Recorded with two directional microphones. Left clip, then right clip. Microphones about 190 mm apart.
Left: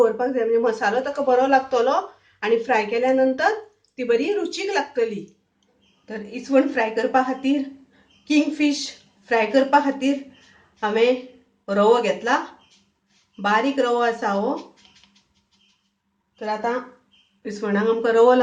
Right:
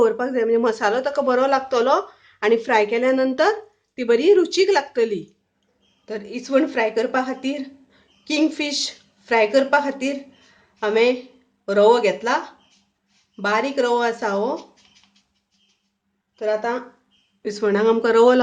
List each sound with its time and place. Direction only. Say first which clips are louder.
0.0 s a woman's voice: right 1 dB; 45° right (ahead or behind)
6.1 s a woman's voice: right 1 dB; 45° right (ahead or behind)
13.4 s a woman's voice: even; 45° right (ahead or behind)
17.4 s a woman's voice: right 4 dB; 45° right (ahead or behind)